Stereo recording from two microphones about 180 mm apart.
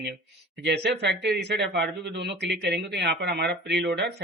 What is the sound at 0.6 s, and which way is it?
Speech, 70° right (ahead or behind).